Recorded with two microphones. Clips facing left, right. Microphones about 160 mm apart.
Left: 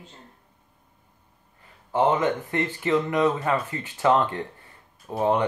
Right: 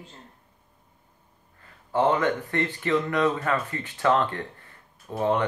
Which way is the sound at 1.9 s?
20° left (ahead or behind).